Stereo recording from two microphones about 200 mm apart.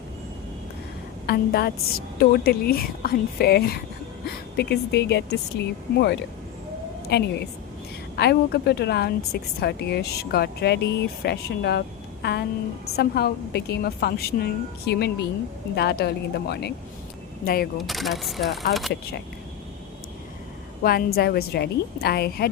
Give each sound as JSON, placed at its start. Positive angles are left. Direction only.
{"t": 1.3, "sound": "a woman's voice", "side_deg": 50}
{"t": 7.1, "sound": "a woman's voice", "side_deg": 55}
{"t": 17.7, "sound": "speech", "side_deg": 0}
{"t": 20.8, "sound": "a woman's voice", "side_deg": 50}